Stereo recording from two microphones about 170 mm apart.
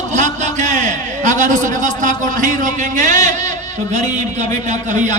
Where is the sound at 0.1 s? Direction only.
45° right (ahead or behind).